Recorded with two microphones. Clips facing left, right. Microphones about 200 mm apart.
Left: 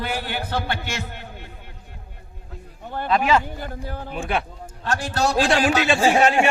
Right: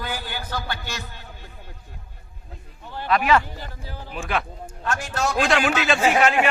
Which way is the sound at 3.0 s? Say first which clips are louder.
Even; 25° left (ahead or behind).